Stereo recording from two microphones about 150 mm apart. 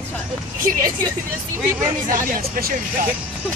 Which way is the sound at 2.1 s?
65° right (ahead or behind).